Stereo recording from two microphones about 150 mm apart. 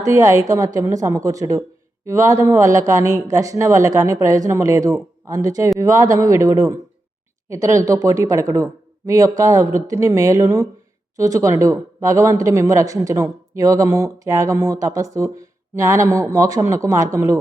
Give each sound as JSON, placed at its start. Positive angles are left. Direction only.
{"t": 0.0, "sound": "speech", "side_deg": -20}